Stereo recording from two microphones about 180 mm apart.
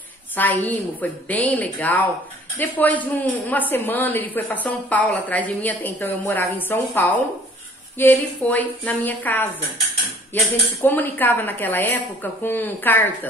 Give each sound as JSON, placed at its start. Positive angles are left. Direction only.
{"t": 0.4, "sound": "a woman's voice", "side_deg": 10}